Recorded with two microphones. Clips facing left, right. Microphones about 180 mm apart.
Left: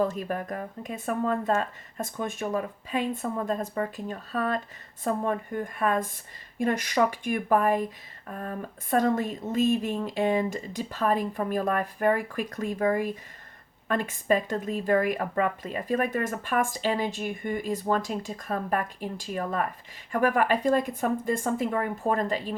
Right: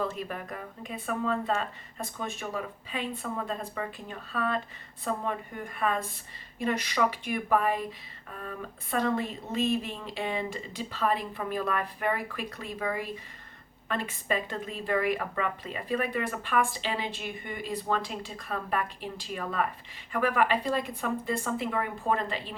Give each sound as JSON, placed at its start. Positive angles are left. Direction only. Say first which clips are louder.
{"t": 0.0, "sound": "speech", "louder": "left 6 dB", "side_deg": 45}